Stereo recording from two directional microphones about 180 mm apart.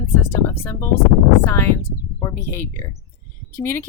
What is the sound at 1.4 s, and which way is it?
A woman's voice, 15° left (ahead or behind).